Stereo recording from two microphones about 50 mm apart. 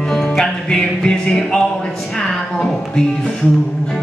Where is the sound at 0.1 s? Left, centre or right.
Centre.